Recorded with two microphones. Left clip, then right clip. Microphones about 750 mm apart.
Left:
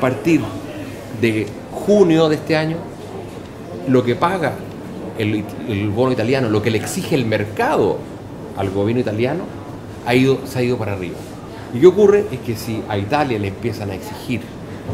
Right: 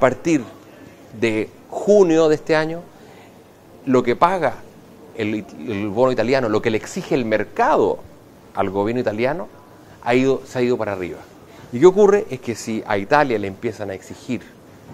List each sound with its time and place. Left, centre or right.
0.0 s speech: right
3.9 s speech: right